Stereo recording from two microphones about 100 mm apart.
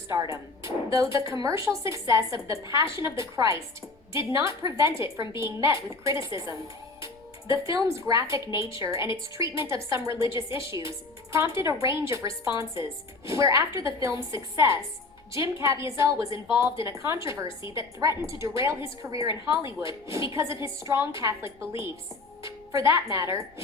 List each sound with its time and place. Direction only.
0.2 s a woman's voice: 35° right (ahead or behind)